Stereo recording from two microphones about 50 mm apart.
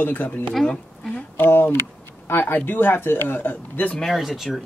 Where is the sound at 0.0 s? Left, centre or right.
Left.